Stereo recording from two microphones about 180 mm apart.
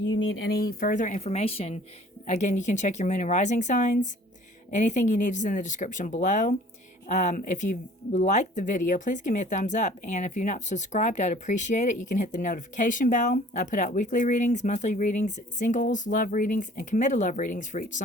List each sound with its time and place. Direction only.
0.1 s speech: 85° left
0.7 s speech: 50° left (ahead or behind)